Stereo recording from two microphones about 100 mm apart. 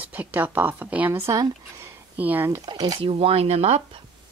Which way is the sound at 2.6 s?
45° right (ahead or behind).